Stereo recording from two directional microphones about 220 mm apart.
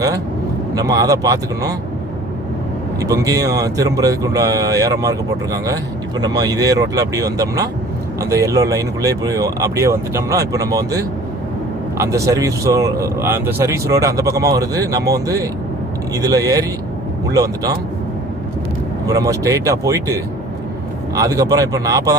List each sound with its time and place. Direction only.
0.7 s speech: 15° right (ahead or behind)
3.0 s speech: 15° right (ahead or behind)
19.0 s speech: 15° right (ahead or behind)
21.2 s speech: 15° right (ahead or behind)